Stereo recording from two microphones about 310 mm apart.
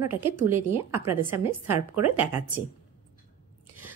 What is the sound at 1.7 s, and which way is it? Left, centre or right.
Speech, right.